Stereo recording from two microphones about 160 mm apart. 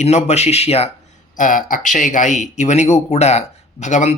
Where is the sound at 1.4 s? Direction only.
55° left (ahead or behind).